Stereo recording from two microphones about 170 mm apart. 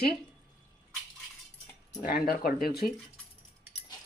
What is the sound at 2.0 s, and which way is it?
Speech, 55° left (ahead or behind).